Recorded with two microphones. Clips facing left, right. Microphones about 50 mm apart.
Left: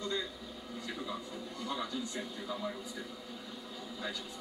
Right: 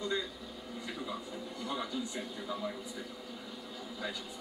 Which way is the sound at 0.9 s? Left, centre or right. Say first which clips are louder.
Right 1 dB; centre.